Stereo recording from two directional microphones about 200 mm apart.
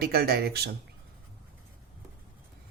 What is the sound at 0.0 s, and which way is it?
Speech, 50° right (ahead or behind).